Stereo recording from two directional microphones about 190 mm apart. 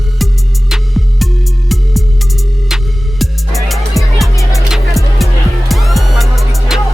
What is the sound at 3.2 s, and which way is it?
Music, centre (ahead or behind).